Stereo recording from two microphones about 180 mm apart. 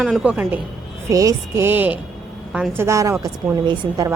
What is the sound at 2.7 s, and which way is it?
A woman's voice, 15° right (ahead or behind).